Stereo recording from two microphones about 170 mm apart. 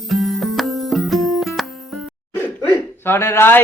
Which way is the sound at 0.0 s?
Centre (ahead or behind).